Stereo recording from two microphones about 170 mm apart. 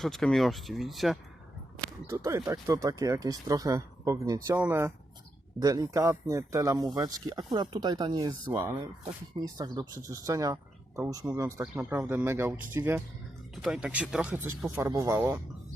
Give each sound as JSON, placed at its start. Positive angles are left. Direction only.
{"t": 0.0, "sound": "speech", "side_deg": 0}
{"t": 2.0, "sound": "speech", "side_deg": -20}
{"t": 8.5, "sound": "speech", "side_deg": -10}
{"t": 9.3, "sound": "speech", "side_deg": -25}